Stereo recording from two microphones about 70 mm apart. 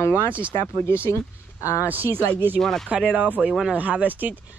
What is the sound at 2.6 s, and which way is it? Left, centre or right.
Speech, centre.